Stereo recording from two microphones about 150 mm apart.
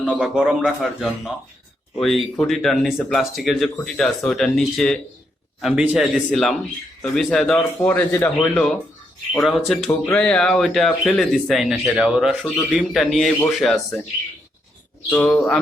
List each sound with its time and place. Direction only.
0.1 s speech: 5° right (ahead or behind); by 8.6 s 15° left (ahead or behind)
9.4 s speech: centre (ahead or behind)
15.1 s speech: 5° left (ahead or behind)